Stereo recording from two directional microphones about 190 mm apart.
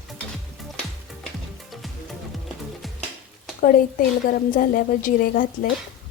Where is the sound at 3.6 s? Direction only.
50° left (ahead or behind).